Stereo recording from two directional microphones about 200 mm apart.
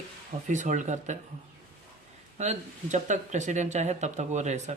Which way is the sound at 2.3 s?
35° right (ahead or behind).